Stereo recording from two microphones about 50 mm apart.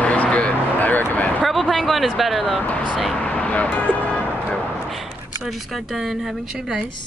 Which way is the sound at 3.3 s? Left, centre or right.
Left.